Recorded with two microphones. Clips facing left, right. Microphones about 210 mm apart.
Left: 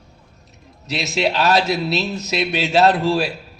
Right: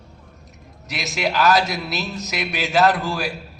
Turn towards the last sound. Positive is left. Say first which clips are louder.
# left 3 dB
turn(degrees=30)  # may be behind; listen again after turning